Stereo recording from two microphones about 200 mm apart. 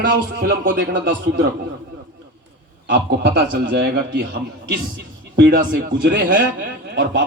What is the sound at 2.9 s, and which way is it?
A man's voice, 60° right (ahead or behind).